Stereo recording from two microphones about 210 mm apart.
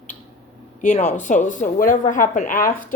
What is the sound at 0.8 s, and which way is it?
Speech, 35° left (ahead or behind).